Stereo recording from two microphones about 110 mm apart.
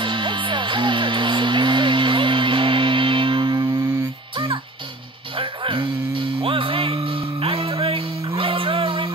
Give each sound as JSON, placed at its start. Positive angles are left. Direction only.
{"t": 0.0, "sound": "music", "side_deg": -50}
{"t": 5.3, "sound": "music", "side_deg": -55}